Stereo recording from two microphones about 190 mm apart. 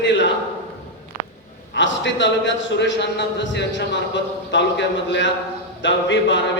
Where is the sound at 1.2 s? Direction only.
50° right (ahead or behind).